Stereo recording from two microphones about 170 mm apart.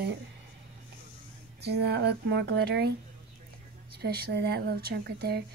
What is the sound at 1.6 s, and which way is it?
Speech, 75° right (ahead or behind).